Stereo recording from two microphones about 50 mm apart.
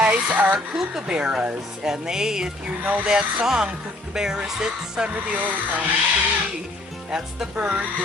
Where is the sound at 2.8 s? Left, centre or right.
Right.